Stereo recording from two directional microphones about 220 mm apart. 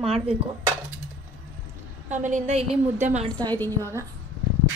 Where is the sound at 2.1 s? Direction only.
35° right (ahead or behind).